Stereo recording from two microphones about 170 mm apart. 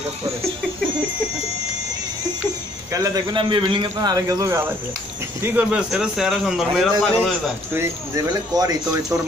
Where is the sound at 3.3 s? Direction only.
30° right (ahead or behind); by 7.5 s centre (ahead or behind).